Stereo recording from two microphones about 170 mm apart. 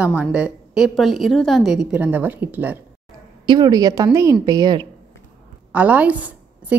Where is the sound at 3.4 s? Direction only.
25° right (ahead or behind).